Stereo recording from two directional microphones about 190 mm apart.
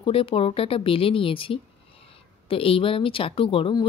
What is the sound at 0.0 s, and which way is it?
Speech, 30° left (ahead or behind).